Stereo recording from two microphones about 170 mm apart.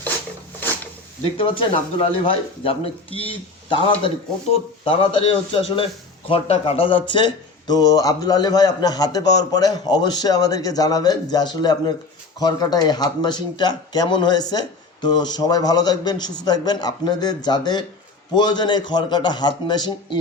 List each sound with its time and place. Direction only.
1.2 s a man's voice: 30° left (ahead or behind)